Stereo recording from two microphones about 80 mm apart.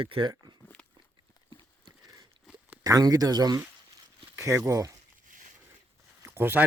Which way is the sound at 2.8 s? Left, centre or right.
Right.